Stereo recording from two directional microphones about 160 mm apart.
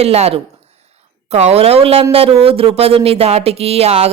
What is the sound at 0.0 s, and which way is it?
Speech, 40° right (ahead or behind).